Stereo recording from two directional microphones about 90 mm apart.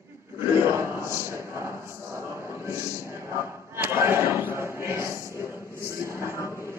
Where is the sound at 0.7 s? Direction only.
30° right (ahead or behind).